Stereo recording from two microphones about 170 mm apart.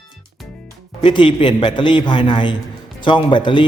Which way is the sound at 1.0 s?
30° left (ahead or behind).